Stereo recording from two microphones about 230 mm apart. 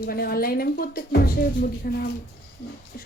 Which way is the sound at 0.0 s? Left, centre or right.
Left.